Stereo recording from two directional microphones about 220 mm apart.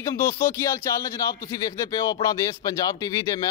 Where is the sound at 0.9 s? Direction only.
15° left (ahead or behind).